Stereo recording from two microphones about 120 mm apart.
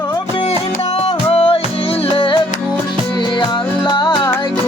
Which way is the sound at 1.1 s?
55° left (ahead or behind).